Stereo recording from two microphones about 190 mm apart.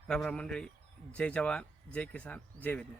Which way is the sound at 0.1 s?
5° left (ahead or behind).